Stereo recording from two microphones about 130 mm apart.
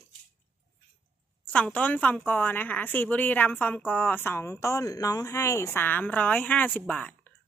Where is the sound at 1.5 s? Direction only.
10° left (ahead or behind).